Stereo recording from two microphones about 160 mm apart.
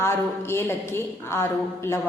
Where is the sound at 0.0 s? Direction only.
15° left (ahead or behind).